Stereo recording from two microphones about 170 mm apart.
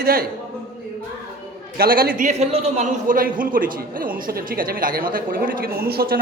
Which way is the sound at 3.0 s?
55° right (ahead or behind).